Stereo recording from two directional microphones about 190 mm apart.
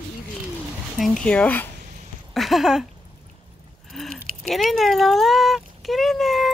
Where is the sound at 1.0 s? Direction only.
5° left (ahead or behind).